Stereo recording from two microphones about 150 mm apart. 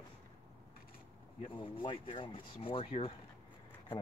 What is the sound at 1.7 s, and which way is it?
Speech, 35° left (ahead or behind).